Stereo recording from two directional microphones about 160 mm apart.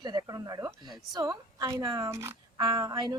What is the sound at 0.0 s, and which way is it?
Speech, 25° right (ahead or behind).